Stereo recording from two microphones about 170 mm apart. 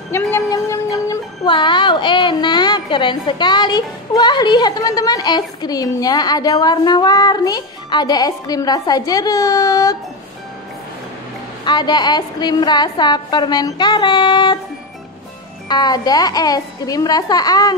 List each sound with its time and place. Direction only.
0.1 s a woman's voice: 15° left (ahead or behind)
11.6 s a woman's voice: 25° left (ahead or behind)
15.7 s a woman's voice: 25° left (ahead or behind)